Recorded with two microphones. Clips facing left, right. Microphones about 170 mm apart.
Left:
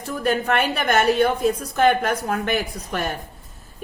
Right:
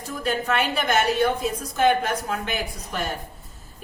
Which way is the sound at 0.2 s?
55° left (ahead or behind).